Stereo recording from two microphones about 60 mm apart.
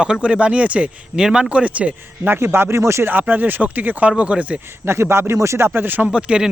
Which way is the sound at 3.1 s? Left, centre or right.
Right.